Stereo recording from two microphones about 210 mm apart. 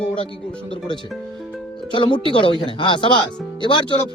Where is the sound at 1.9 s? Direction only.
25° left (ahead or behind).